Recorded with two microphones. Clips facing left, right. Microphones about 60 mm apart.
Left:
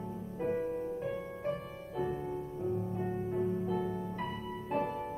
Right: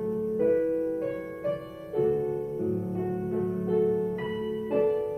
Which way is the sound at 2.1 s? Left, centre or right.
Right.